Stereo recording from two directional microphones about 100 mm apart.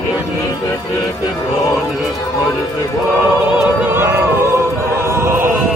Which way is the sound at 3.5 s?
20° right (ahead or behind).